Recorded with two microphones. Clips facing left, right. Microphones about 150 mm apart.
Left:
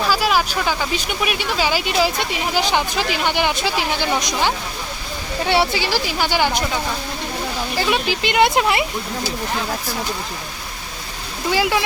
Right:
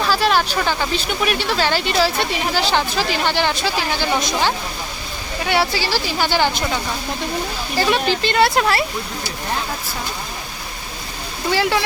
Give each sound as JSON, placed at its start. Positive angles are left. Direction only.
{"t": 0.1, "sound": "speech", "side_deg": 5}
{"t": 8.1, "sound": "speech", "side_deg": 15}
{"t": 11.5, "sound": "speech", "side_deg": 15}